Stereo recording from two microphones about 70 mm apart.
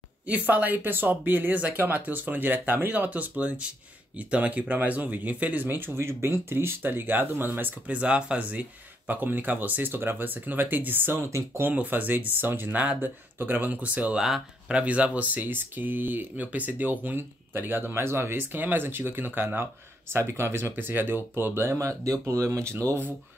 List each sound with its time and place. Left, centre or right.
0.3 s speech: right
8.0 s speech: centre
11.2 s speech: right
11.7 s speech: right
21.7 s speech: right